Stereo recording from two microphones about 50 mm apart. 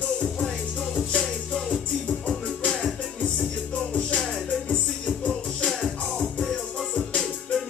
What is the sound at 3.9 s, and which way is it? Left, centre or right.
Music, left.